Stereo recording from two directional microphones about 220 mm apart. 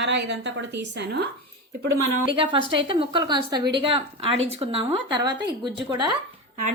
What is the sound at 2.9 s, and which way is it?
Speech, 20° right (ahead or behind).